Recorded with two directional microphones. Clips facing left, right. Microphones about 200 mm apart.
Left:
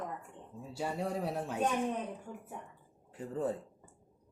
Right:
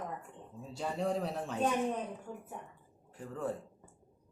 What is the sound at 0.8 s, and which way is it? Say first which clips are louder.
Speech: right 1 dB; 5° left (ahead or behind).